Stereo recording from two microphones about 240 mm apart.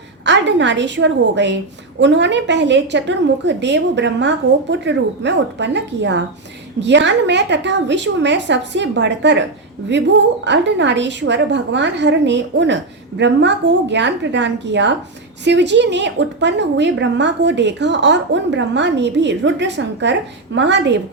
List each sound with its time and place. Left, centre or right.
0.3 s a woman's voice: right